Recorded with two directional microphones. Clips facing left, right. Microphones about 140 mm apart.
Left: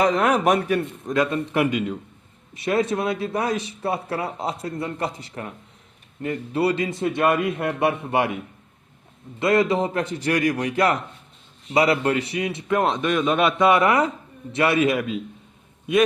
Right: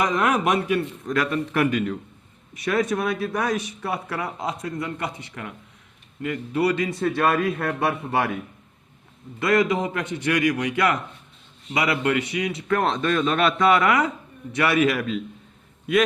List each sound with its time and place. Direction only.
0.0 s a man's voice: 35° left (ahead or behind)
1.1 s speech: 20° left (ahead or behind)
9.4 s a man's voice: 25° left (ahead or behind)